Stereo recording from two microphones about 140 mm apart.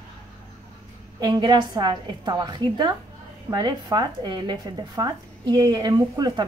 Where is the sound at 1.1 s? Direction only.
30° right (ahead or behind).